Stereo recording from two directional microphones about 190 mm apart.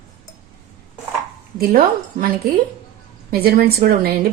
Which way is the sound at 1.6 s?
50° right (ahead or behind).